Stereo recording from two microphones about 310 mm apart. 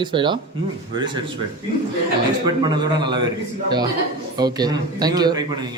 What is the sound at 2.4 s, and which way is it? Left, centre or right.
Speech, centre.